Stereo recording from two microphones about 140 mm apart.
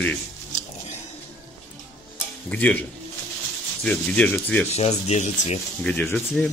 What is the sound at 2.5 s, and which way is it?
Speech, 10° left (ahead or behind).